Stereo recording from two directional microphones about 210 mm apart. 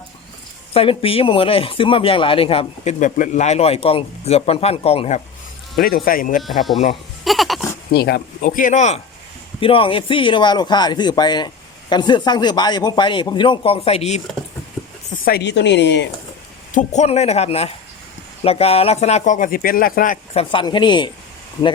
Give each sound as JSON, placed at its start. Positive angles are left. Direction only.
{"t": 0.7, "sound": "speech", "side_deg": 25}
{"t": 5.7, "sound": "speech", "side_deg": 45}
{"t": 6.4, "sound": "speech", "side_deg": 0}
{"t": 7.3, "sound": "goat", "side_deg": 0}
{"t": 7.9, "sound": "speech", "side_deg": 50}
{"t": 9.6, "sound": "speech", "side_deg": 25}
{"t": 15.1, "sound": "a woman's voice", "side_deg": 45}
{"t": 16.7, "sound": "speech", "side_deg": 35}
{"t": 20.4, "sound": "speech", "side_deg": 25}